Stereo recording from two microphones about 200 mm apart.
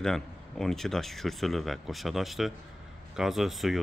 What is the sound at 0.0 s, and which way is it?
Speech, centre (ahead or behind).